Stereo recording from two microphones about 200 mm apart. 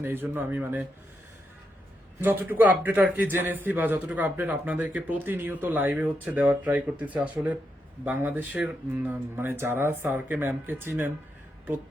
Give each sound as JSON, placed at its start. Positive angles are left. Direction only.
{"t": 0.0, "sound": "a man's voice", "side_deg": -10}
{"t": 2.2, "sound": "a man's voice", "side_deg": -10}